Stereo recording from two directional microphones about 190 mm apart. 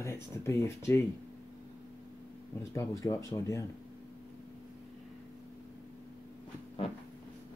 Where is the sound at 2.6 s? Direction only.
15° left (ahead or behind).